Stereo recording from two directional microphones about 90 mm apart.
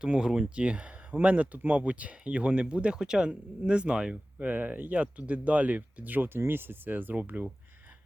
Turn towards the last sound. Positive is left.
turn(degrees=-20)  # may be behind; listen again after turning